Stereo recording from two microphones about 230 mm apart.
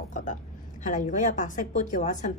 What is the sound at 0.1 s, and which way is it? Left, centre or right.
A woman's voice, left.